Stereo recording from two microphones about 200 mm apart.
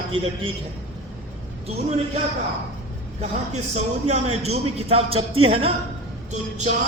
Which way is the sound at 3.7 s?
35° right (ahead or behind).